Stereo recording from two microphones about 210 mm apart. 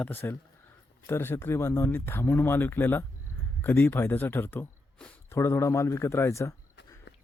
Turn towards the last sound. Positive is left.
turn(degrees=55)  # may be behind; listen again after turning